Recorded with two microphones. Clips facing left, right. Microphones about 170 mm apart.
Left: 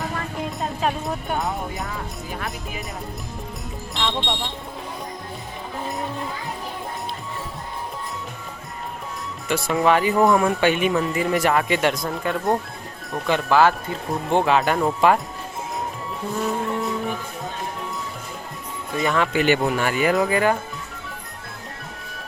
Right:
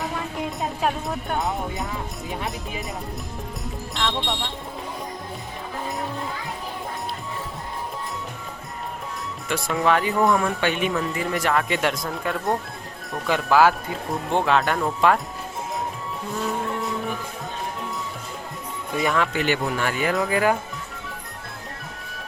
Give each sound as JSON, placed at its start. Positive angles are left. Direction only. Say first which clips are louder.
{"t": 0.0, "sound": "music", "louder": "even", "side_deg": -5}
{"t": 2.3, "sound": "speech", "louder": "right 2 dB", "side_deg": -25}
{"t": 3.9, "sound": "speech", "louder": "left 1 dB", "side_deg": 0}
{"t": 9.5, "sound": "speech", "louder": "left 3 dB", "side_deg": 0}
{"t": 16.7, "sound": "music", "louder": "left 2 dB", "side_deg": 0}
{"t": 18.9, "sound": "speech", "louder": "left 1 dB", "side_deg": 0}